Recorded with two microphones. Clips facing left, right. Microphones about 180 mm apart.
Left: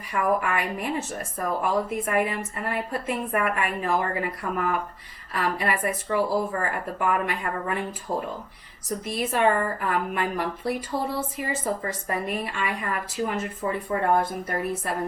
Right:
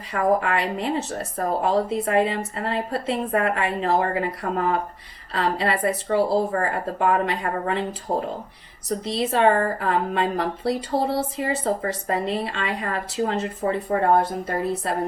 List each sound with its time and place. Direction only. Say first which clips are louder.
0.1 s a woman's voice: right 3 dB; 25° right (ahead or behind)